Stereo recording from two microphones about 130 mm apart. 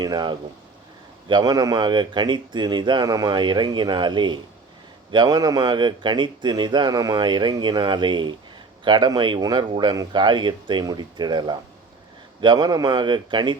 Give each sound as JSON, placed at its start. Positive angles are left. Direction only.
{"t": 0.0, "sound": "speech", "side_deg": -35}